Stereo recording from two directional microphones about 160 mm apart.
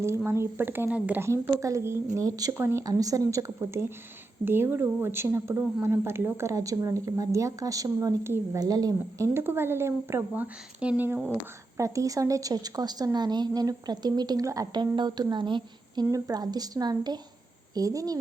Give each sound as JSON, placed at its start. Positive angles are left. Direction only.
{"t": 0.3, "sound": "a woman's voice", "side_deg": -15}